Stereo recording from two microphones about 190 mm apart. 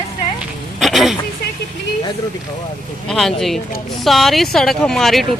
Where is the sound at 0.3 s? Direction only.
Centre (ahead or behind).